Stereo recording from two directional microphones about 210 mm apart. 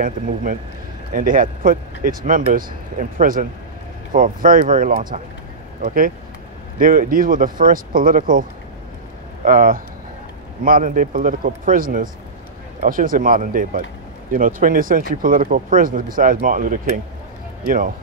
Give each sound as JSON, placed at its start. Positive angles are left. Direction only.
{"t": 0.0, "sound": "speech", "side_deg": -40}